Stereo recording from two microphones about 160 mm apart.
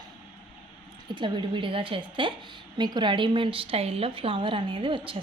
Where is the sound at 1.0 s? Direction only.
30° right (ahead or behind).